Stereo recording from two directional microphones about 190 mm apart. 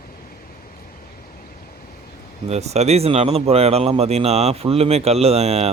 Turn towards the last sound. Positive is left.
turn(degrees=-35)  # may be behind; listen again after turning